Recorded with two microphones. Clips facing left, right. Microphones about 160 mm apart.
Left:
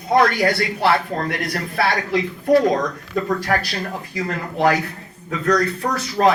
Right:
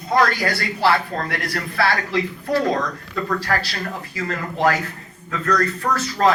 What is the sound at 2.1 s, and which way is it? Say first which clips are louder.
Speech: left 5 dB; 20° left (ahead or behind).